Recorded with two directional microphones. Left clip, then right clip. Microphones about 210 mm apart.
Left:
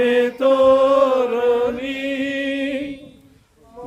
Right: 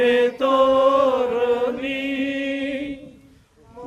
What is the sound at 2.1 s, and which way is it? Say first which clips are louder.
Music: left 5 dB; 25° left (ahead or behind).